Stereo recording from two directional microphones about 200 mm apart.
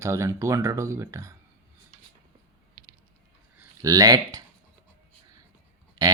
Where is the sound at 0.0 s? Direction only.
15° right (ahead or behind).